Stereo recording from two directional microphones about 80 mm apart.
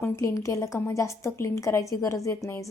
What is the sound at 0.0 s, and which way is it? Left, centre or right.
A woman's voice, left.